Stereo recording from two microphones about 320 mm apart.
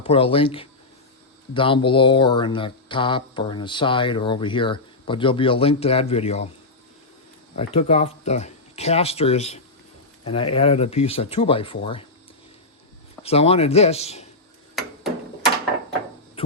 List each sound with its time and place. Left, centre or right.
0.0 s speech: centre
7.5 s speech: centre
13.2 s speech: centre